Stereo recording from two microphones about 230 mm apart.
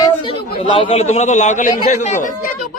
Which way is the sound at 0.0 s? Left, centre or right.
Left.